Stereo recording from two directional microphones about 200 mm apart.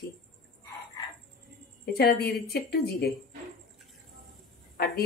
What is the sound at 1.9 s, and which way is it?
A woman's voice, 50° left (ahead or behind).